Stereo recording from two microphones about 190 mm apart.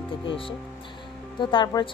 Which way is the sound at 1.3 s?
20° left (ahead or behind).